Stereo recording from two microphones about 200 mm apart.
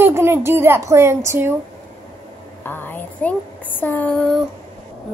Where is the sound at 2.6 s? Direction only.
10° left (ahead or behind).